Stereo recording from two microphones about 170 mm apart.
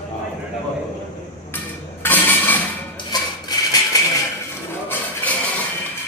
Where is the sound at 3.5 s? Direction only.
25° left (ahead or behind).